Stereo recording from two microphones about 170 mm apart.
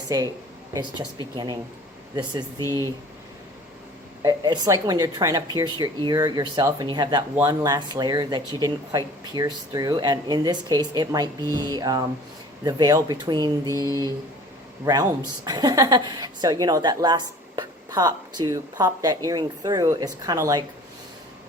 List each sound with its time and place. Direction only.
0.1 s a woman's voice: 20° right (ahead or behind)
2.6 s speech: 20° left (ahead or behind)
4.2 s a woman's voice: 25° right (ahead or behind)
13.7 s speech: 20° left (ahead or behind)
15.4 s a woman's voice: 25° right (ahead or behind)